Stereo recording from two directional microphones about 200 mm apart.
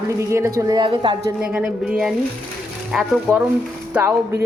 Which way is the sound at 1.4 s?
5° right (ahead or behind).